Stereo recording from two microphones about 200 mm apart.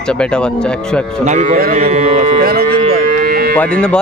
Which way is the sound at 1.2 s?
35° right (ahead or behind).